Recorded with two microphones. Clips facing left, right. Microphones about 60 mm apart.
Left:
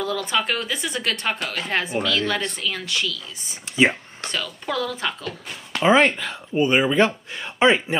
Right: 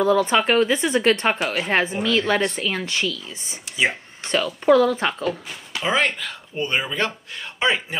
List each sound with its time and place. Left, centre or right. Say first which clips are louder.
0.0 s speech: right 6 dB; right
1.4 s a woman's voice: right 4 dB; centre
1.7 s speech: right 1 dB; right
4.6 s speech: right 11 dB; right
5.9 s speech: left 5 dB; left